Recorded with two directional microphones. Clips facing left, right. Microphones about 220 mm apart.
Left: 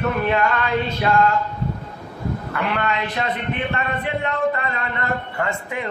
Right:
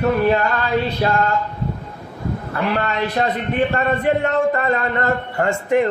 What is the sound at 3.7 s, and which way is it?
Speech, 45° right (ahead or behind).